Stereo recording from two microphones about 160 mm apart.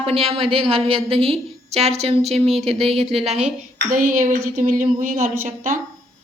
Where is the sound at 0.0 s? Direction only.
35° right (ahead or behind).